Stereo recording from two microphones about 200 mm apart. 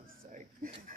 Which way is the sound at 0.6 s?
45° right (ahead or behind).